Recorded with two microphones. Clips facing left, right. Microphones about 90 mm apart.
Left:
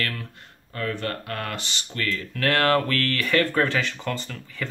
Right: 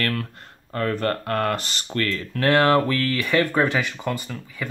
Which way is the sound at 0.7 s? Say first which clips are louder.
Right 5 dB; 45° right (ahead or behind).